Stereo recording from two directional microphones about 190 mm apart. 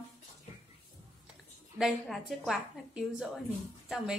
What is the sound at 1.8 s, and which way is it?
A woman's voice, centre (ahead or behind).